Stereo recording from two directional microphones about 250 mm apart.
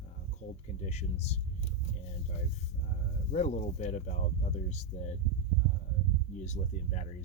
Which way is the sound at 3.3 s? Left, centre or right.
Left.